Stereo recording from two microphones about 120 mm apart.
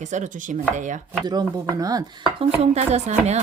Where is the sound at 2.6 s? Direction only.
65° right (ahead or behind).